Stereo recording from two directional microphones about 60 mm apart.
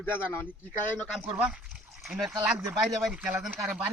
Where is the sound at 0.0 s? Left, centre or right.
Left.